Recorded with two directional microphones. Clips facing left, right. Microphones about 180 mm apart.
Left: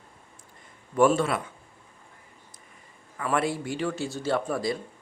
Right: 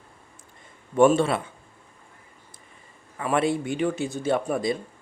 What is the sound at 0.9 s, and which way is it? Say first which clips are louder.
Speech: right 3 dB; 25° right (ahead or behind).